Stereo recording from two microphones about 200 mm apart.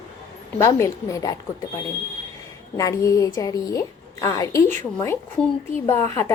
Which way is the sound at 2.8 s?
15° left (ahead or behind).